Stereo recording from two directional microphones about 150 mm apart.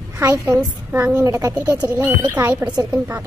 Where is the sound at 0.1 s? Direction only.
20° right (ahead or behind).